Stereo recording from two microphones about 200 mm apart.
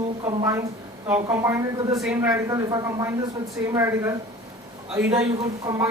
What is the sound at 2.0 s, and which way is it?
Speech, centre (ahead or behind).